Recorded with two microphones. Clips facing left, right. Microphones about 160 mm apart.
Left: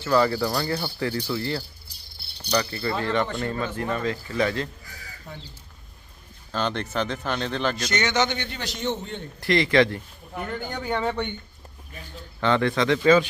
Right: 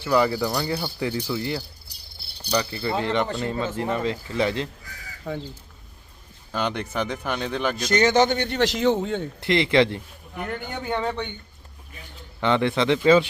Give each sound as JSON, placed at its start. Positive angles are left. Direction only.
{"t": 0.0, "sound": "speech", "side_deg": -15}
{"t": 2.6, "sound": "speech", "side_deg": -25}
{"t": 5.3, "sound": "a man's voice", "side_deg": -90}
{"t": 6.5, "sound": "speech", "side_deg": -15}
{"t": 7.9, "sound": "a man's voice", "side_deg": -30}
{"t": 8.4, "sound": "a man's voice", "side_deg": -85}
{"t": 9.4, "sound": "speech", "side_deg": -20}
{"t": 10.7, "sound": "a man's voice", "side_deg": -5}
{"t": 12.4, "sound": "speech", "side_deg": -20}